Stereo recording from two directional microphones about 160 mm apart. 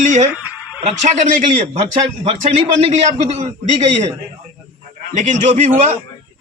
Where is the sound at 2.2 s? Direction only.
40° right (ahead or behind).